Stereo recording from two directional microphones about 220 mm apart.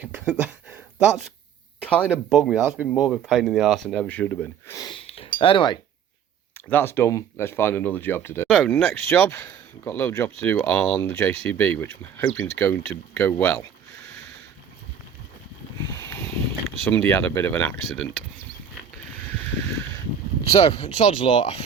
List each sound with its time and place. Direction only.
0.0 s speech: 5° right (ahead or behind)
1.8 s speech: 5° left (ahead or behind)
4.8 s speech: 25° left (ahead or behind)
6.7 s speech: 10° left (ahead or behind)
16.0 s speech: 10° left (ahead or behind)
20.4 s speech: 25° left (ahead or behind)